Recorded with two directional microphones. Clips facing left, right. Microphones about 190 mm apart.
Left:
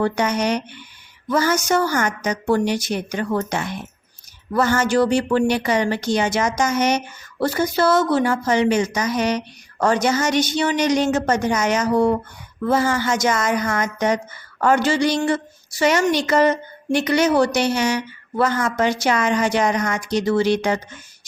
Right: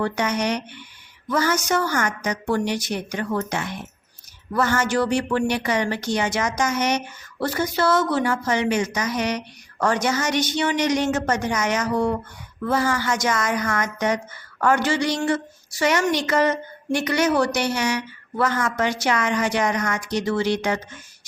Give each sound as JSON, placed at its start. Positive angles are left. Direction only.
{"t": 0.0, "sound": "a woman's voice", "side_deg": 30}
{"t": 4.5, "sound": "a woman's voice", "side_deg": 30}
{"t": 14.8, "sound": "a woman's voice", "side_deg": 30}